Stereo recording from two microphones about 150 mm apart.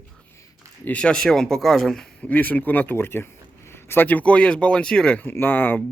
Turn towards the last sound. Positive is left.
turn(degrees=15)  # may be behind; listen again after turning